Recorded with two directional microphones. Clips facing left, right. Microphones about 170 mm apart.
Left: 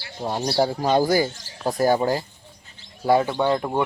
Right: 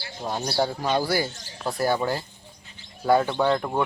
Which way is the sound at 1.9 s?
40° left (ahead or behind).